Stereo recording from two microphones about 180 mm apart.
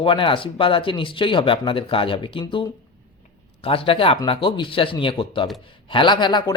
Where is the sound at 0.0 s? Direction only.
30° left (ahead or behind).